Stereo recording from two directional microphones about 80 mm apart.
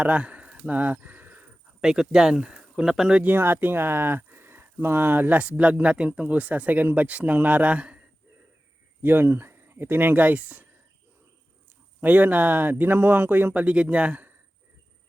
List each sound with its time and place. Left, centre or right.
0.0 s a sound: centre
1.8 s speech: centre
3.2 s speech: right
9.0 s speech: right
11.9 s speech: right